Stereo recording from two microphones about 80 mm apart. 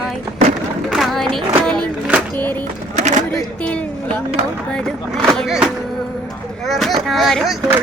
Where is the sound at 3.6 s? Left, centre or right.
Centre.